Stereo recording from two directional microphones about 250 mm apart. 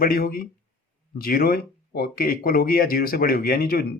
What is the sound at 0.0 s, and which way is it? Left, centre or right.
Speech, left.